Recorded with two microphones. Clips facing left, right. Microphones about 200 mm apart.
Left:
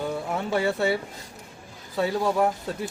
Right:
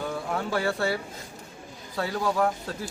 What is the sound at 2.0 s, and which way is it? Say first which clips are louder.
Speech: left 3 dB; 20° left (ahead or behind).